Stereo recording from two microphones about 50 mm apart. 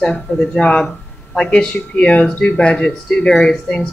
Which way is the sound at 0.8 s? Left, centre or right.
Centre.